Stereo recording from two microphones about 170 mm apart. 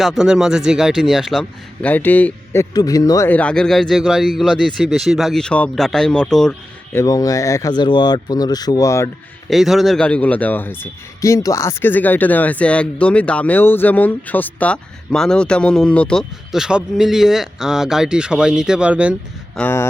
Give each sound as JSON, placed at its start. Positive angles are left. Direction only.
{"t": 0.0, "sound": "speech", "side_deg": 0}
{"t": 3.2, "sound": "speech", "side_deg": 10}
{"t": 6.9, "sound": "speech", "side_deg": 20}
{"t": 9.5, "sound": "a man's voice", "side_deg": 0}
{"t": 19.5, "sound": "a man's voice", "side_deg": 15}